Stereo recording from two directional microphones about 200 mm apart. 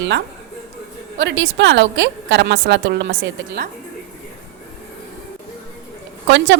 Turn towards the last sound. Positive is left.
turn(degrees=-60)  # may be behind; listen again after turning